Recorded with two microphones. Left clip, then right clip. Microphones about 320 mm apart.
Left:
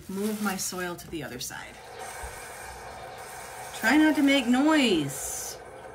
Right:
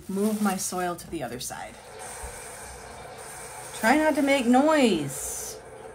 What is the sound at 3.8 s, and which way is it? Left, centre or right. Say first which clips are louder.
Speech: right 1 dB; centre.